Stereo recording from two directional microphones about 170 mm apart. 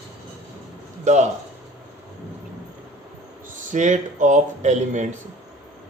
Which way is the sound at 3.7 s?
45° right (ahead or behind).